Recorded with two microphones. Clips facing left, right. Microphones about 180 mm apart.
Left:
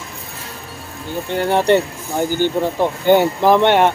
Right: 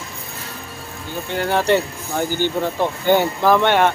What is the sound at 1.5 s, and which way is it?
Speech, 20° left (ahead or behind).